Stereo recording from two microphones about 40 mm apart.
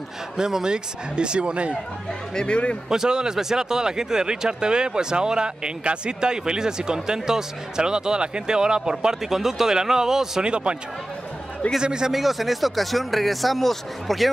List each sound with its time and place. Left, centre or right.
0.4 s speech: centre
2.3 s a man's voice: left
2.9 s speech: centre
10.5 s speech: right
11.8 s speech: centre
12.1 s speech: centre